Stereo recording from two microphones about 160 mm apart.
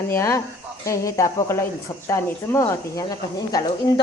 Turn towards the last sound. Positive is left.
turn(degrees=25)  # may be behind; listen again after turning